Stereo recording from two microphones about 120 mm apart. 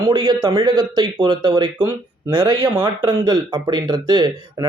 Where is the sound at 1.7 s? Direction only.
20° right (ahead or behind).